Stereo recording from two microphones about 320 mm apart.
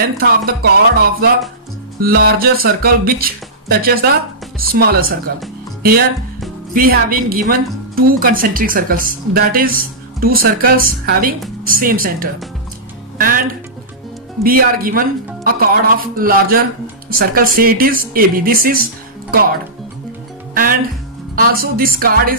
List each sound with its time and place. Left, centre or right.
0.0 s a woman's voice: right
5.8 s music: right
6.7 s a woman's voice: right
21.4 s a woman's voice: right